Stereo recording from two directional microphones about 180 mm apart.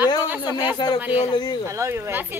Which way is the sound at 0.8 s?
25° left (ahead or behind).